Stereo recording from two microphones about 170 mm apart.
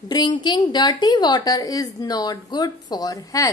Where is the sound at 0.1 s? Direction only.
25° left (ahead or behind).